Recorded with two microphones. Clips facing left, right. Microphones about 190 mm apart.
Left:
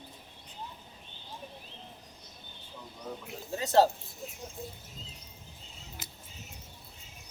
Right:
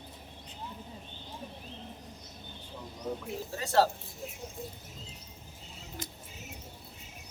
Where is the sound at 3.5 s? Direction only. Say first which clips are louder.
Left 3 dB; 20° left (ahead or behind).